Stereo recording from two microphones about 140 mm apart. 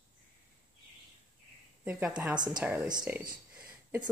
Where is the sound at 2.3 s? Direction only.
30° right (ahead or behind).